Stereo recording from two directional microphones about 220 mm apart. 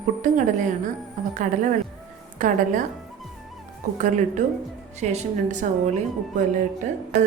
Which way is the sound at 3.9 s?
35° right (ahead or behind).